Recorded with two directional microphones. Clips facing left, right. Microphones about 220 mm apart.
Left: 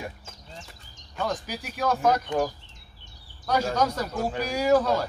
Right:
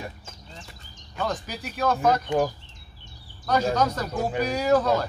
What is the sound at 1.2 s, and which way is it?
Speech, 10° left (ahead or behind).